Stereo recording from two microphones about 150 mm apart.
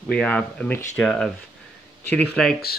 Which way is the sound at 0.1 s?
5° left (ahead or behind).